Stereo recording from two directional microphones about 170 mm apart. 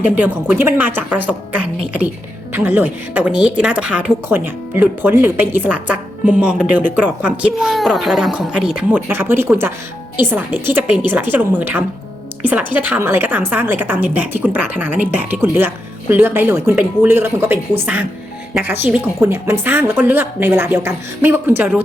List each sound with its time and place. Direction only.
0.0 s a woman's voice: 10° right (ahead or behind)